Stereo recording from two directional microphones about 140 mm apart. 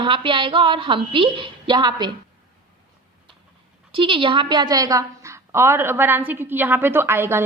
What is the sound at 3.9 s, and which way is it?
A woman's voice, 40° right (ahead or behind).